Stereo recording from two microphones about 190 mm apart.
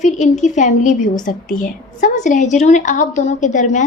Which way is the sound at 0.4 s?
40° left (ahead or behind).